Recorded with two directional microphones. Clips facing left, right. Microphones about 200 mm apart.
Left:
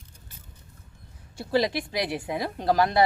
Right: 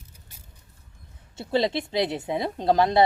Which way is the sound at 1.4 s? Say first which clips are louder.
Right 1 dB; 25° right (ahead or behind).